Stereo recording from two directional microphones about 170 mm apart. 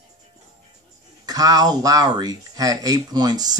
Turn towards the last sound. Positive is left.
turn(degrees=-25)  # may be behind; listen again after turning